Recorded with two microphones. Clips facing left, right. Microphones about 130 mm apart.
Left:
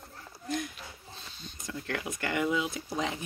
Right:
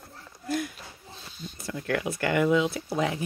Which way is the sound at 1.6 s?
60° right (ahead or behind).